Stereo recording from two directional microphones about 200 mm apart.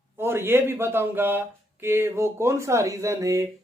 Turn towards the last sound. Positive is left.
turn(degrees=-15)  # may be behind; listen again after turning